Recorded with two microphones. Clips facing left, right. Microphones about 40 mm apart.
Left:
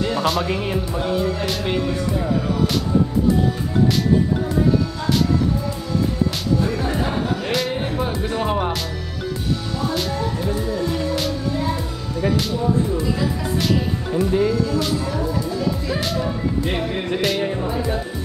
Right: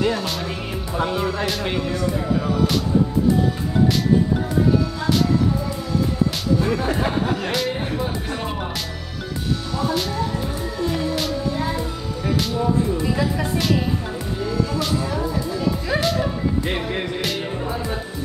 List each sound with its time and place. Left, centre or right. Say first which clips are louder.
1.0 s speech: right 1 dB; centre
6.6 s music: right 1 dB; centre
7.4 s a man's voice: left 1 dB; centre
8.5 s music: left 6 dB; centre
9.8 s music: even; centre
14.5 s speech: left 2 dB; centre
16.0 s music: right 2 dB; centre
16.6 s music: left 1 dB; centre
17.2 s speech: left 4 dB; centre